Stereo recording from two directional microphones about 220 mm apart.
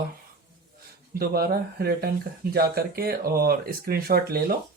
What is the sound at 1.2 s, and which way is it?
Speech, 45° right (ahead or behind).